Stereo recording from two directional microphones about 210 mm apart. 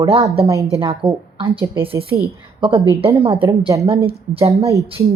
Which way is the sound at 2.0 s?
50° right (ahead or behind).